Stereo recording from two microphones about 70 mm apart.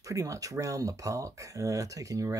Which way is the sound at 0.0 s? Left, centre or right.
Right.